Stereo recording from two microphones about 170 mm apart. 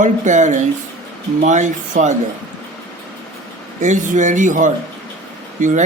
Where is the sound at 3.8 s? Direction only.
45° right (ahead or behind).